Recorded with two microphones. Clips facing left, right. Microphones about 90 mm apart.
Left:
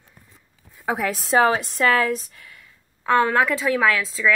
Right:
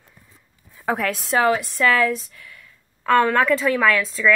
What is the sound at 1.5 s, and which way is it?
A woman's voice, 35° left (ahead or behind).